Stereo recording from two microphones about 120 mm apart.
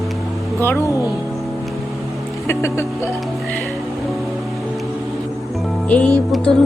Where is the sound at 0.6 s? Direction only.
20° left (ahead or behind).